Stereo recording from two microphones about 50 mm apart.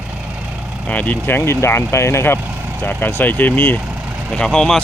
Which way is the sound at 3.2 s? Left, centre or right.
Left.